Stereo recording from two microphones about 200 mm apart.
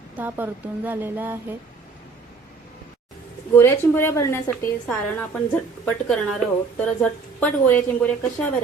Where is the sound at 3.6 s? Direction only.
10° left (ahead or behind).